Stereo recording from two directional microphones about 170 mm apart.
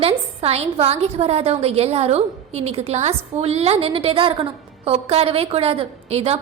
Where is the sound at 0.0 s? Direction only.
35° right (ahead or behind).